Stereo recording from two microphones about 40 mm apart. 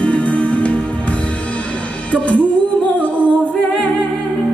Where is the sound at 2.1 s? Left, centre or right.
Left.